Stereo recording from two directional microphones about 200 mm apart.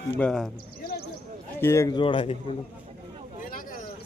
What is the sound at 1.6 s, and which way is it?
Speech, 15° left (ahead or behind).